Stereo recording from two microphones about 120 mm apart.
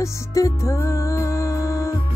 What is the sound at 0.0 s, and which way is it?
Music, 25° left (ahead or behind).